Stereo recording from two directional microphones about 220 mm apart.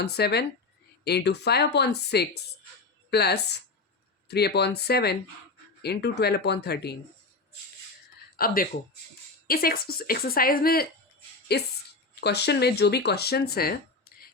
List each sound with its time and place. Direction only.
0.0 s a woman's voice: 45° left (ahead or behind)
8.4 s a woman's voice: 40° left (ahead or behind)